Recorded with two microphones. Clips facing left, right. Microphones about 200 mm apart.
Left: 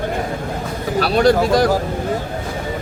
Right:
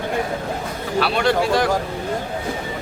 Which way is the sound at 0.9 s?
40° left (ahead or behind).